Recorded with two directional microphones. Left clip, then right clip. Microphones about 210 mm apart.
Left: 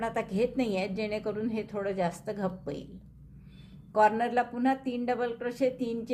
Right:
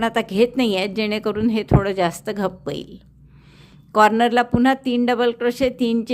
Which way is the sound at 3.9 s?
40° right (ahead or behind).